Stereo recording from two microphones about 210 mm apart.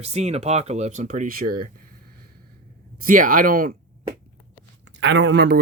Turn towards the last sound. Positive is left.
turn(degrees=-50)  # may be behind; listen again after turning